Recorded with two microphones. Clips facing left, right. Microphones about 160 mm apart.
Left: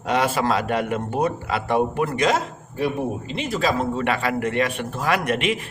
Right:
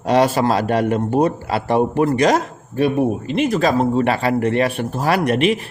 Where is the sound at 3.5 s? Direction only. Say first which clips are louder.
Right 4 dB; 45° right (ahead or behind).